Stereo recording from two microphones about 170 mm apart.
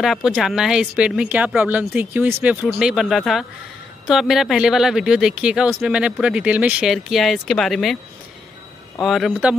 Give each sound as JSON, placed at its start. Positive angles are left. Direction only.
{"t": 0.0, "sound": "speech", "side_deg": 0}
{"t": 9.0, "sound": "speech", "side_deg": 0}